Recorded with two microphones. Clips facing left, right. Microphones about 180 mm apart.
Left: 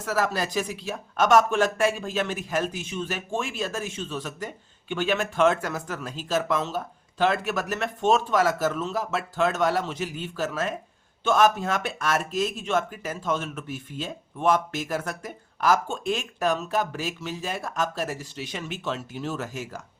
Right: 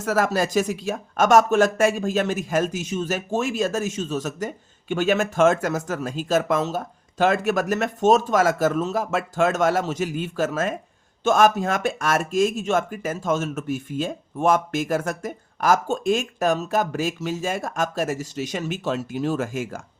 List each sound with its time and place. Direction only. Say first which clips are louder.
0.0 s speech: right 5 dB; 45° right (ahead or behind)